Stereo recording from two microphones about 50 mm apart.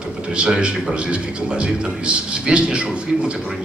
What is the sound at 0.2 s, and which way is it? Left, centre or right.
A man's voice, centre.